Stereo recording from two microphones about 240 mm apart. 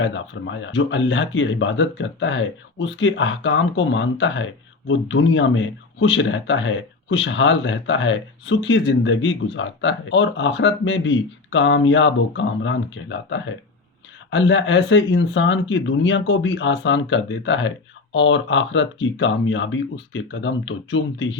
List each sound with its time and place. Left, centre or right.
0.0 s speech: left